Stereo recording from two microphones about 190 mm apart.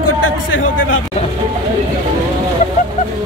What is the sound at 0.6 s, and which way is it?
Speech, 90° left.